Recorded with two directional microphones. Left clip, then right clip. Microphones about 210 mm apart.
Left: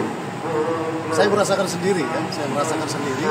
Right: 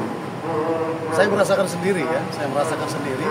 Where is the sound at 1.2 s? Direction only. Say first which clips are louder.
Even; 25° right (ahead or behind).